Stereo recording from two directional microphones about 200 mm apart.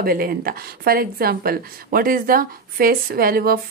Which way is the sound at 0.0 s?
50° right (ahead or behind).